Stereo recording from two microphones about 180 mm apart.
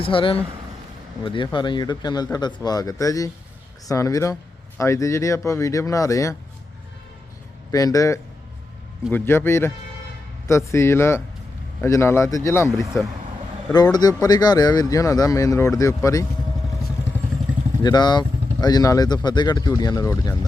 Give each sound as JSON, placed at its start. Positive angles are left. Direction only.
{"t": 0.0, "sound": "speech", "side_deg": 30}
{"t": 7.7, "sound": "speech", "side_deg": 20}
{"t": 13.9, "sound": "speech", "side_deg": 20}
{"t": 17.8, "sound": "speech", "side_deg": 25}